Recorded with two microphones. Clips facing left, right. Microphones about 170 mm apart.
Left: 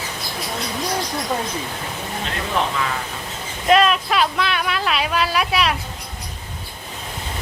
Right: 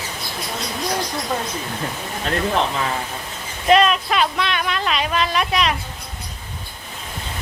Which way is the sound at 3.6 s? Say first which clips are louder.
Right 1 dB; centre (ahead or behind).